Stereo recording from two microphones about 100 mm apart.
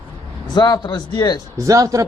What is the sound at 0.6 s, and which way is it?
Speech, 40° left (ahead or behind).